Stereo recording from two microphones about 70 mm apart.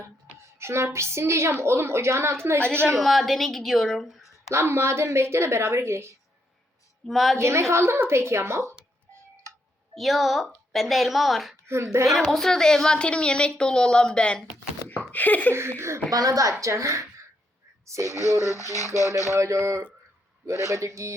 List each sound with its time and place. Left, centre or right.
0.6 s a woman's voice: right
2.9 s a woman's voice: centre
4.5 s a woman's voice: right
7.0 s a woman's voice: centre
7.3 s a woman's voice: right
9.9 s a woman's voice: centre
11.6 s a woman's voice: right
12.3 s a woman's voice: centre
14.8 s speech: left
15.5 s a woman's voice: right
16.0 s a woman's voice: right